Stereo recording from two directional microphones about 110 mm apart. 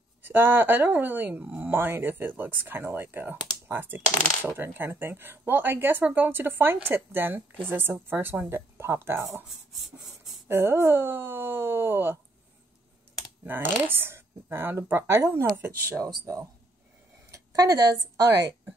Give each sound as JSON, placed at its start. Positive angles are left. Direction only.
{"t": 0.2, "sound": "speech", "side_deg": -20}
{"t": 10.5, "sound": "speech", "side_deg": -20}
{"t": 13.4, "sound": "speech", "side_deg": -20}
{"t": 17.3, "sound": "a sound", "side_deg": -30}